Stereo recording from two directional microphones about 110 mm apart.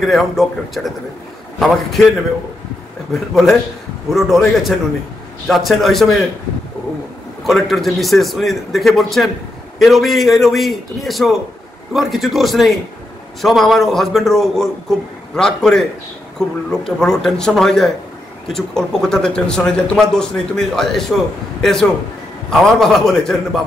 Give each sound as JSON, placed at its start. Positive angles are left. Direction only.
{"t": 0.0, "sound": "speech", "side_deg": 0}
{"t": 3.1, "sound": "speech", "side_deg": 0}
{"t": 7.4, "sound": "a man's voice", "side_deg": 0}